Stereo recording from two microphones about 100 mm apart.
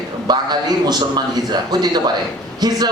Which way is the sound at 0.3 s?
45° right (ahead or behind).